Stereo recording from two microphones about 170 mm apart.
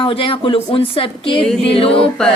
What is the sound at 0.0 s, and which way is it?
Speech, 30° left (ahead or behind).